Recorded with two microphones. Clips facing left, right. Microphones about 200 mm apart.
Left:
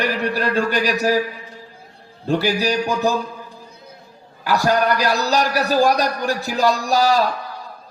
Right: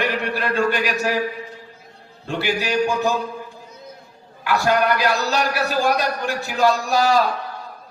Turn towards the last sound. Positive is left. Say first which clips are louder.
# left 1 dB
turn(degrees=40)  # may be behind; listen again after turning